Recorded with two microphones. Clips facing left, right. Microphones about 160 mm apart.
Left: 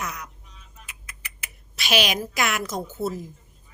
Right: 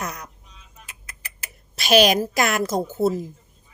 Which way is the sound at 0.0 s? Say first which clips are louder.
Right 2 dB; 40° right (ahead or behind).